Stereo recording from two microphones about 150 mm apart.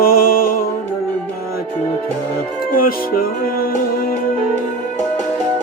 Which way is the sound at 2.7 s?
75° left (ahead or behind).